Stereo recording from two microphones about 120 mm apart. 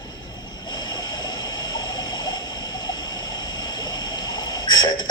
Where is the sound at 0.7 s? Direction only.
35° left (ahead or behind).